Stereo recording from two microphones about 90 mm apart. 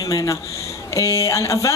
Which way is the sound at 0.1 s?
40° left (ahead or behind).